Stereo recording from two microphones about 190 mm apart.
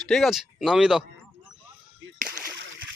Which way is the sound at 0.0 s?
Centre (ahead or behind).